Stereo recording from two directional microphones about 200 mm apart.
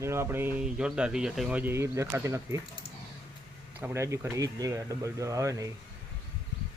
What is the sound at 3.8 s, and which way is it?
A man's voice, 15° right (ahead or behind).